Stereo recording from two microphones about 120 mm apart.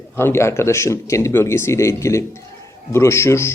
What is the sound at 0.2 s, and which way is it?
A man's voice, 20° left (ahead or behind).